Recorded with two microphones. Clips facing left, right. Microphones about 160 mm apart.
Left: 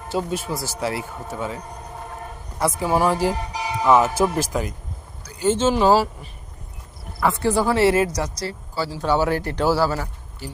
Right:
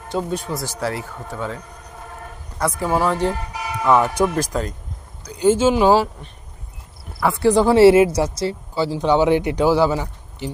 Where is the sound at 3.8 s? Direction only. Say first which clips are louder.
Even; 5° left (ahead or behind).